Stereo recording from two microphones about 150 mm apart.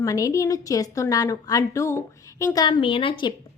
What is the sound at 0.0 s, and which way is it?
A woman's voice, 20° left (ahead or behind).